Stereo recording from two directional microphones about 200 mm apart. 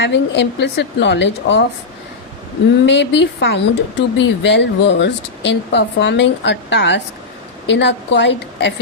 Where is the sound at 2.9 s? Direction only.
60° left (ahead or behind).